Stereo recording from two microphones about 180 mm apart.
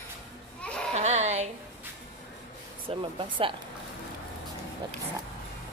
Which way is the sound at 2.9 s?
30° right (ahead or behind).